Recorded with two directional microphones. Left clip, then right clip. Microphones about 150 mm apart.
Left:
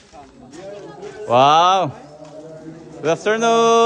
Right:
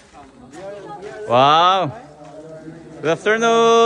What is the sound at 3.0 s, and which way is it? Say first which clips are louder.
Speech: even; 15° left (ahead or behind).